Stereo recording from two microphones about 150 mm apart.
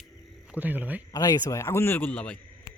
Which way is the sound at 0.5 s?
10° right (ahead or behind).